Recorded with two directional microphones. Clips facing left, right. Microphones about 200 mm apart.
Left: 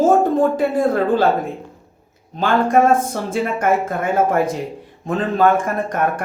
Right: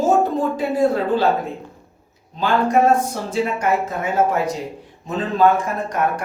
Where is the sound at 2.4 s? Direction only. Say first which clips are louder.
Left 2 dB; 50° left (ahead or behind).